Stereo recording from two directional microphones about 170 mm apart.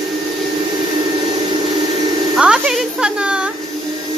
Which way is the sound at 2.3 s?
5° right (ahead or behind).